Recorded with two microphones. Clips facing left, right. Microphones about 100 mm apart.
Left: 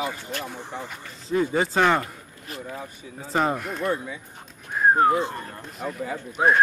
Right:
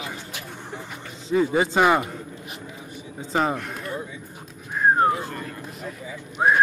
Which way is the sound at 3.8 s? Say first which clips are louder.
Left 5 dB; 70° left (ahead or behind).